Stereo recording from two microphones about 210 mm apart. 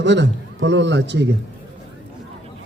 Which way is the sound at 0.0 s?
60° right (ahead or behind).